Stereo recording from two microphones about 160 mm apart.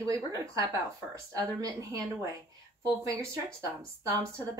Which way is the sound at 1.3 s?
20° right (ahead or behind).